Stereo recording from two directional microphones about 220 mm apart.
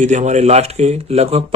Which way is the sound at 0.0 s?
35° right (ahead or behind).